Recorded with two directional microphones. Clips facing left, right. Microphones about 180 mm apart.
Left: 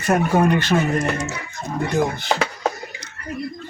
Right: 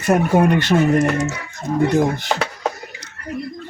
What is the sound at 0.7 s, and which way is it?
Speech, 15° right (ahead or behind).